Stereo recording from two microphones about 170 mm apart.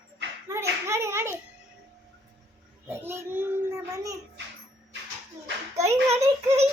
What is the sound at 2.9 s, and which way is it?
A child's voice, 15° right (ahead or behind).